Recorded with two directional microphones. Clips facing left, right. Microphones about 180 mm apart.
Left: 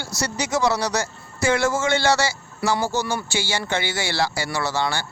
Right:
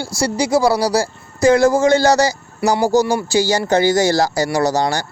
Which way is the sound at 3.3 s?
40° right (ahead or behind).